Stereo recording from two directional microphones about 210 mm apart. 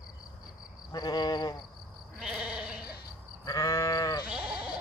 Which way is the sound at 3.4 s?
15° left (ahead or behind).